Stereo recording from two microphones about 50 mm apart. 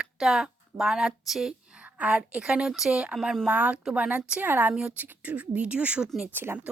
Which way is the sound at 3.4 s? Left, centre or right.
Right.